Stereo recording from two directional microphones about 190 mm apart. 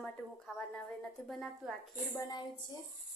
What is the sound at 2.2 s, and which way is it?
Speech, 20° left (ahead or behind).